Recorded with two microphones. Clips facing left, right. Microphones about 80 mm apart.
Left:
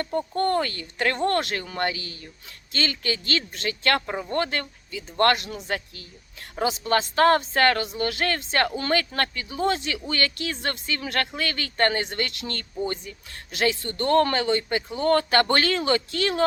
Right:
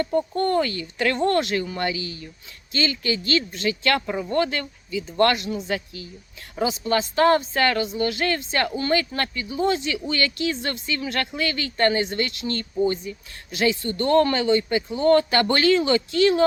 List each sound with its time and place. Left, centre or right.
0.3 s speech: left